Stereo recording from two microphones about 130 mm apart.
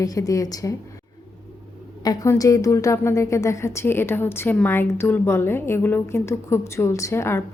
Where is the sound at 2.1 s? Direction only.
25° left (ahead or behind).